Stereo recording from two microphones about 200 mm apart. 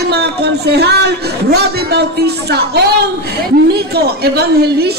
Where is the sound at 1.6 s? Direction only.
55° right (ahead or behind).